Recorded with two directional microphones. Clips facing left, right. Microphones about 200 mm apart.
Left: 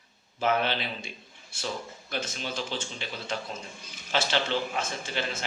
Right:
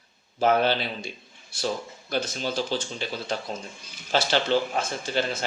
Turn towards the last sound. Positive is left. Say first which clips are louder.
# right 6 dB
turn(degrees=-35)  # may be behind; listen again after turning